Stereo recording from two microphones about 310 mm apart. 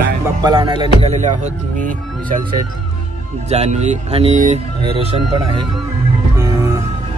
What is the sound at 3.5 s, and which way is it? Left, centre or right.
Speech, right.